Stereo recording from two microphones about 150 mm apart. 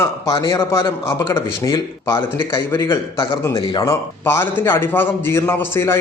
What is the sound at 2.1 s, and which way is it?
A man's voice, 35° left (ahead or behind).